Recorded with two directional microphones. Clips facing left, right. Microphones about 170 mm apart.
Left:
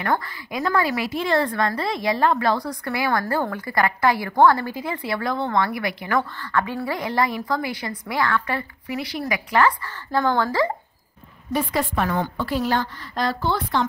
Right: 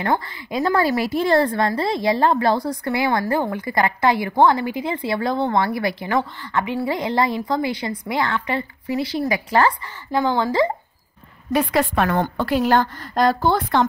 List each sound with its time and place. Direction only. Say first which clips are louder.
0.0 s a woman's voice: right 2 dB; 25° right (ahead or behind)
10.1 s a woman's voice: right 2 dB; 20° right (ahead or behind)
11.5 s a woman's voice: right 4 dB; 70° right (ahead or behind); by 13.8 s 50° right (ahead or behind)